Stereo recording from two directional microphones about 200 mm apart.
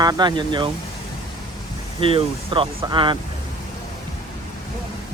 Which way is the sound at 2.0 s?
25° right (ahead or behind).